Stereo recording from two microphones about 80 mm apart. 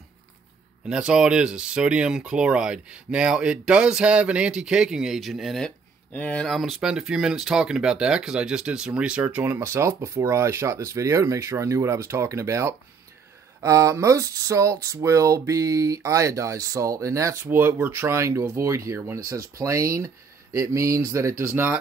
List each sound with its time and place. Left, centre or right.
0.8 s speech: centre
6.1 s speech: centre
6.5 s speech: centre; by 17.4 s right
17.5 s speech: right